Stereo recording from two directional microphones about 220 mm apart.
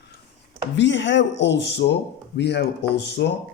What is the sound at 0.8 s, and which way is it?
Speech, 55° left (ahead or behind).